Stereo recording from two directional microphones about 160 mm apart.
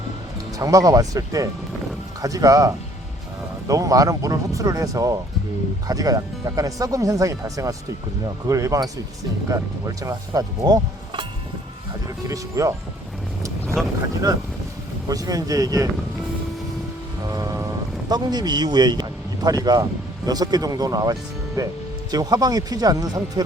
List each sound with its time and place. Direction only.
0.5 s speech: 20° right (ahead or behind)
12.3 s speech: 20° right (ahead or behind)
15.1 s speech: 20° right (ahead or behind)
17.2 s boat: 20° right (ahead or behind)
18.1 s speech: 25° right (ahead or behind)